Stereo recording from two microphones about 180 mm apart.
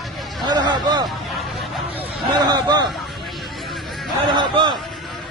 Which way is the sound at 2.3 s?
20° right (ahead or behind).